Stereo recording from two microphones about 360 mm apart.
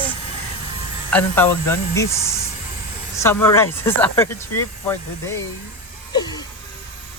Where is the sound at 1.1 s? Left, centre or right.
Centre.